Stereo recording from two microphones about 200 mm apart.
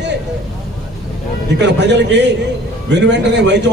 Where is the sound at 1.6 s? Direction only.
60° right (ahead or behind).